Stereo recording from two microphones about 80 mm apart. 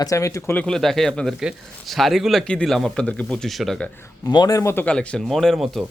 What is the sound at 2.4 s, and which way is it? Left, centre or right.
A man's voice, centre.